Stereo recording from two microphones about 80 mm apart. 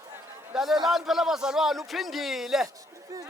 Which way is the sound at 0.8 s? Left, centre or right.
Centre.